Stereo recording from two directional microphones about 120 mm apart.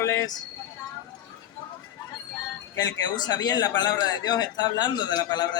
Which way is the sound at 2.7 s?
30° left (ahead or behind).